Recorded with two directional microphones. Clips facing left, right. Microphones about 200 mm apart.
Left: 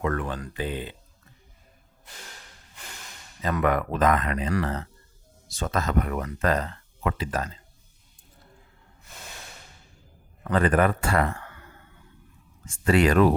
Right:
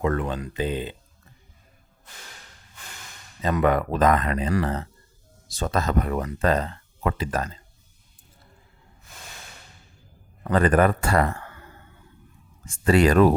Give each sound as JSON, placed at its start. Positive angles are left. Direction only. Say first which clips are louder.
{"t": 0.0, "sound": "speech", "louder": "right 3 dB", "side_deg": -20}
{"t": 3.4, "sound": "speech", "louder": "right 3 dB", "side_deg": -25}
{"t": 10.5, "sound": "speech", "louder": "right 2 dB", "side_deg": -40}